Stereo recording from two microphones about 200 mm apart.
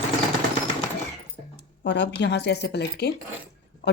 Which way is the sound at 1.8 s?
60° left (ahead or behind).